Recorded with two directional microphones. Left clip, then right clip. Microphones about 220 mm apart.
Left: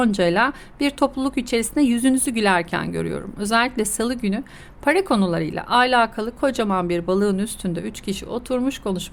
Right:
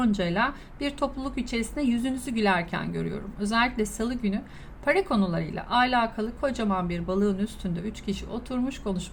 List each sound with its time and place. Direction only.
0.0 s a woman's voice: 55° left (ahead or behind)